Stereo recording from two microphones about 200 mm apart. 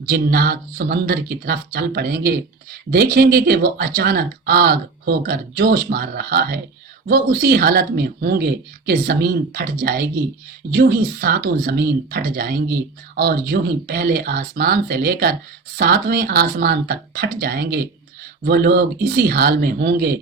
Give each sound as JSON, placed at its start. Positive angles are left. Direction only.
{"t": 0.0, "sound": "speech", "side_deg": -50}